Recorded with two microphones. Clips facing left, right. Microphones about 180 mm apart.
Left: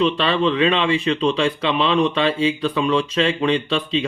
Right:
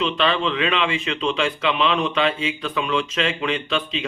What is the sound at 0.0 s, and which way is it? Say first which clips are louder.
Speech: left 3 dB; 35° left (ahead or behind).